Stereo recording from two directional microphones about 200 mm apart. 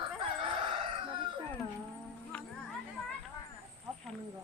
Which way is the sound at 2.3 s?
5° left (ahead or behind).